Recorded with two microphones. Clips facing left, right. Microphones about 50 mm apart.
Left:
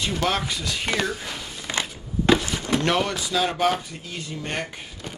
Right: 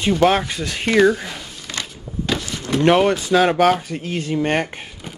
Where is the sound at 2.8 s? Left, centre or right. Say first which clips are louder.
Right 12 dB; right.